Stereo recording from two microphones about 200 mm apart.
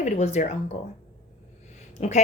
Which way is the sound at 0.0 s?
35° left (ahead or behind).